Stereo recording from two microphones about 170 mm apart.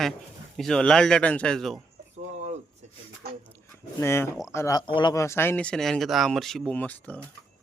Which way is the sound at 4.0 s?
15° left (ahead or behind).